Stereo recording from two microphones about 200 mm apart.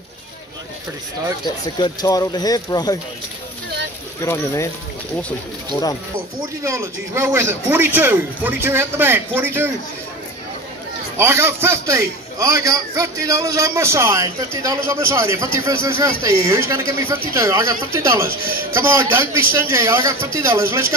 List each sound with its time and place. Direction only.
1.8 s speech: 20° left (ahead or behind)
4.2 s speech: 15° left (ahead or behind)
6.6 s a man's voice: 15° right (ahead or behind)
11.1 s a man's voice: 10° right (ahead or behind)